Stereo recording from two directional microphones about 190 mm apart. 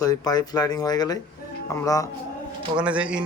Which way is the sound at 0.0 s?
20° left (ahead or behind).